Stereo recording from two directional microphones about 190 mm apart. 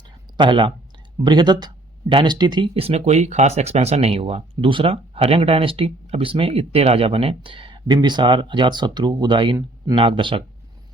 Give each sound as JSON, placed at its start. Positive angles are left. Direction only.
{"t": 0.3, "sound": "speech", "side_deg": -25}